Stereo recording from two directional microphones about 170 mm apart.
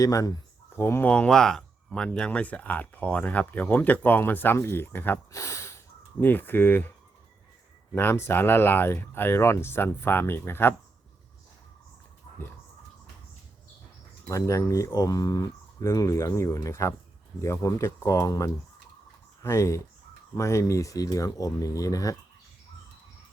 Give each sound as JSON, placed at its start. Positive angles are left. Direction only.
{"t": 0.0, "sound": "speech", "side_deg": 20}
{"t": 7.9, "sound": "speech", "side_deg": 15}
{"t": 14.3, "sound": "speech", "side_deg": 20}